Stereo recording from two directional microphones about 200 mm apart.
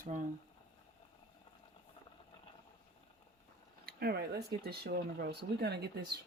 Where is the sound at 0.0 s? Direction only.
40° right (ahead or behind).